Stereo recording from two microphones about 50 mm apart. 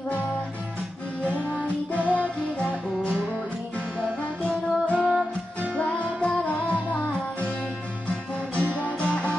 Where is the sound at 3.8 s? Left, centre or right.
Right.